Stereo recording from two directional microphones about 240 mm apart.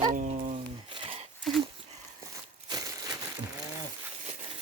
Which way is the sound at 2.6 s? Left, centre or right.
Centre.